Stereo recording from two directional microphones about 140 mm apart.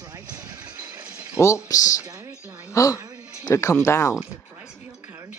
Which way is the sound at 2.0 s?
25° right (ahead or behind).